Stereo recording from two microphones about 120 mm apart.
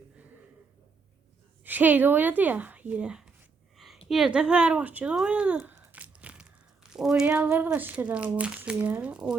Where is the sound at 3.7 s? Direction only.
Centre (ahead or behind).